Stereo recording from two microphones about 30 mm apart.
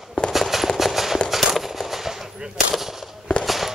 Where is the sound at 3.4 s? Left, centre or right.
Centre.